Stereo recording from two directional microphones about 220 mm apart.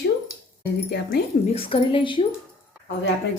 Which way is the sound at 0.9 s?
50° left (ahead or behind).